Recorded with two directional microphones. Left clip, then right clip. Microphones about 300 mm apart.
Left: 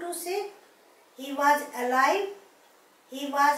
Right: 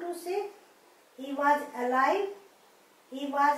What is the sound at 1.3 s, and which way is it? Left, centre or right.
Speech, centre.